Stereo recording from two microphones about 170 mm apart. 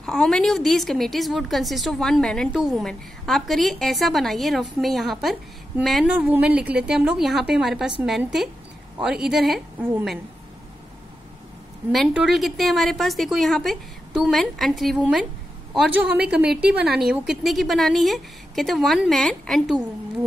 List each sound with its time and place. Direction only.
0.0 s a woman's voice: centre (ahead or behind)
11.9 s a woman's voice: 5° right (ahead or behind)
16.4 s a woman's voice: 70° right (ahead or behind)
16.8 s a woman's voice: centre (ahead or behind)